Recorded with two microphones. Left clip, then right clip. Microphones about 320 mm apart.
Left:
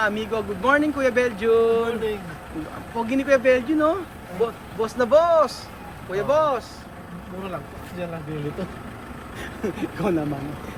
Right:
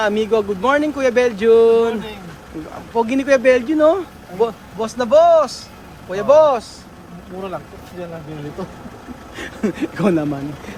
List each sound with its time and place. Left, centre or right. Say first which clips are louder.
0.0 s speech: right 7 dB; centre
9.4 s speech: right 6 dB; right